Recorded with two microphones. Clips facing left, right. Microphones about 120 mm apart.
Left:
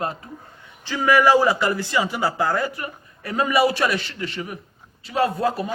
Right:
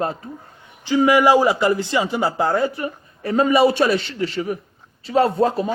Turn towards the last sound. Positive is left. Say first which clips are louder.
# right 4 dB
turn(degrees=-30)  # may be behind; listen again after turning